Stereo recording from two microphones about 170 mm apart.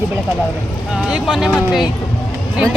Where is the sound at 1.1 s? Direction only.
5° right (ahead or behind).